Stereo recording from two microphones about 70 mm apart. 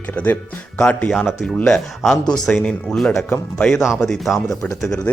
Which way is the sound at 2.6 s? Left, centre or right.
Centre.